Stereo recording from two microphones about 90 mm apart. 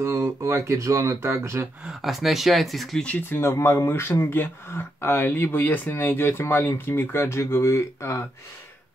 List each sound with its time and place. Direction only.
0.0 s speech: 30° right (ahead or behind)
1.9 s speech: 5° right (ahead or behind)
3.1 s speech: 20° left (ahead or behind)